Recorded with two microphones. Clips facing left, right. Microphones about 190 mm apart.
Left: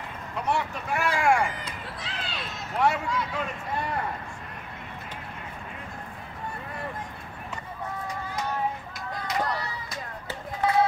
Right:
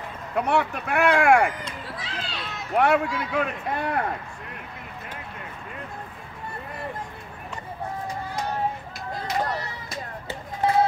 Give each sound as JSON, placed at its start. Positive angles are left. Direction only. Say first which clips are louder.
{"t": 0.4, "sound": "speech", "louder": "right 5 dB", "side_deg": -60}
{"t": 1.6, "sound": "run", "louder": "right 2 dB", "side_deg": 0}
{"t": 2.5, "sound": "speech", "louder": "right 5 dB", "side_deg": -60}
{"t": 9.1, "sound": "a sound", "louder": "right 2 dB", "side_deg": -25}